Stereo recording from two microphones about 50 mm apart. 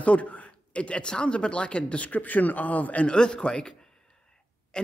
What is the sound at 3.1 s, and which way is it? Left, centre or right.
Speech, centre.